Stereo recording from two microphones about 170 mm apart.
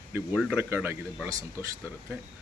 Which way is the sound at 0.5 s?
15° right (ahead or behind).